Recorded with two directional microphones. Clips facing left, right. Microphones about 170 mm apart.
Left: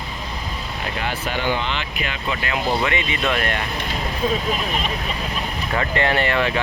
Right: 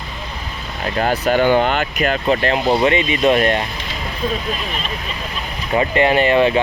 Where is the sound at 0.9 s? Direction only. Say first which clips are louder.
Right 11 dB; 40° right (ahead or behind).